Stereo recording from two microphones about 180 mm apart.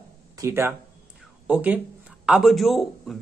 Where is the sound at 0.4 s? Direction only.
15° right (ahead or behind).